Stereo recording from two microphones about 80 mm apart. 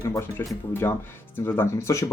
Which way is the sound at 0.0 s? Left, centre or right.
Left.